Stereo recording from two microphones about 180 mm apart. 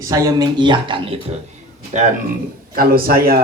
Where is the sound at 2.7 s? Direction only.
55° right (ahead or behind).